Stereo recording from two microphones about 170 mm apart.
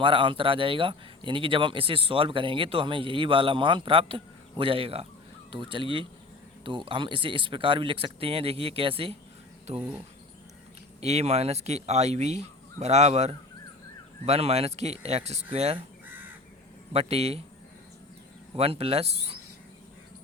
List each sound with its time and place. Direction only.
0.0 s speech: 30° right (ahead or behind)
11.0 s speech: 40° right (ahead or behind)
16.9 s speech: 35° right (ahead or behind)
18.5 s speech: 35° right (ahead or behind)